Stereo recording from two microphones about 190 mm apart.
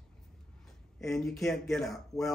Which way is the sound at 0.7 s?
Centre (ahead or behind).